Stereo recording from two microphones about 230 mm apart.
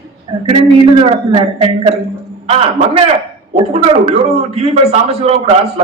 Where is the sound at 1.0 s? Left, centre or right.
Right.